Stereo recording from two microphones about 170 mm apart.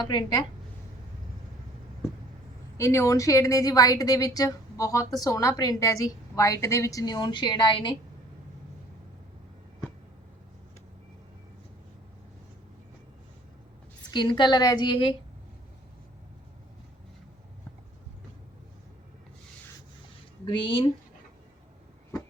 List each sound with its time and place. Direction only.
0.0 s a woman's voice: 25° left (ahead or behind)
2.7 s a woman's voice: 15° left (ahead or behind)
14.1 s a woman's voice: 25° left (ahead or behind)
20.5 s a woman's voice: 30° left (ahead or behind)